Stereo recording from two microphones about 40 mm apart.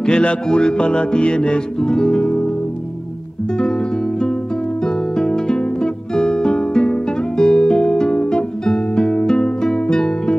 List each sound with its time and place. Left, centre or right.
0.0 s music: left
4.8 s music: centre